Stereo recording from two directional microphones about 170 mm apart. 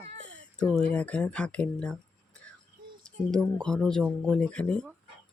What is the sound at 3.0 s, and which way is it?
Speech, 5° left (ahead or behind).